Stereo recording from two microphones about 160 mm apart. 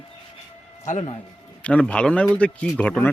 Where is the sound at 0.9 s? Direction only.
45° left (ahead or behind).